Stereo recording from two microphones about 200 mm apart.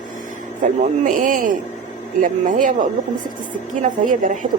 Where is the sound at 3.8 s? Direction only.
40° right (ahead or behind).